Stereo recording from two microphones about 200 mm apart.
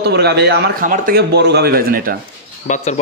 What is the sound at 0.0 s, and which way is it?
A man's voice, 55° right (ahead or behind).